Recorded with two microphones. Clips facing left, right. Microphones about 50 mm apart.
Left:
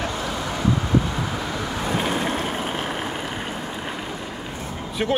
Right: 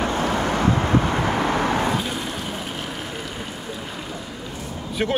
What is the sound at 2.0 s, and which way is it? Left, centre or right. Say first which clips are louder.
Vehicle: left 4 dB; left.